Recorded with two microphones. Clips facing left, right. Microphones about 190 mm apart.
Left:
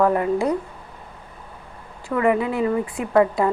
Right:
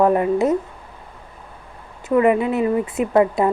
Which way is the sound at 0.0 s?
20° right (ahead or behind).